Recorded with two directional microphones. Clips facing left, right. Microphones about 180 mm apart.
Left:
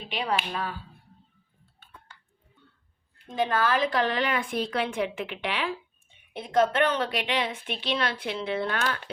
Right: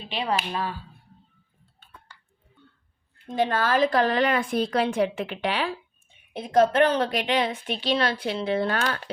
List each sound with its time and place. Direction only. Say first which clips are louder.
0.1 s speech: right 2 dB; 25° right (ahead or behind)
3.2 s a woman's voice: right 2 dB; 40° right (ahead or behind)